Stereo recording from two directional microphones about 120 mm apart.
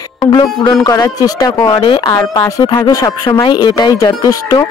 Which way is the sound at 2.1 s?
30° left (ahead or behind).